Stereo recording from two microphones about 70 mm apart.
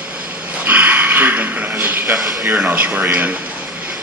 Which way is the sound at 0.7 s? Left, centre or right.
Right.